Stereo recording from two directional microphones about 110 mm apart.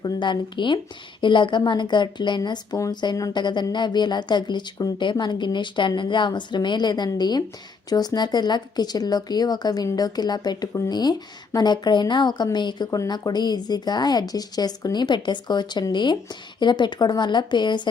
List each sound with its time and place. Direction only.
0.0 s a woman's voice: 45° left (ahead or behind)
2.7 s a woman's voice: 30° left (ahead or behind)